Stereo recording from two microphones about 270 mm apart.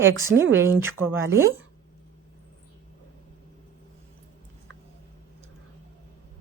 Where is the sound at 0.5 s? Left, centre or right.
Centre.